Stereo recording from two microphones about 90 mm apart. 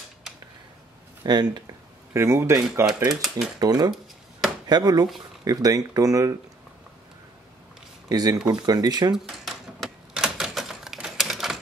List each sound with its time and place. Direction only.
1.2 s speech: 50° right (ahead or behind)
2.1 s speech: 30° right (ahead or behind)
3.1 s speech: 5° right (ahead or behind)
3.5 s speech: 50° right (ahead or behind)
8.1 s speech: 45° right (ahead or behind)
9.1 s typewriter: 5° right (ahead or behind)